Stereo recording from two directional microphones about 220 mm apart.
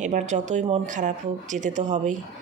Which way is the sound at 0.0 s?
35° right (ahead or behind).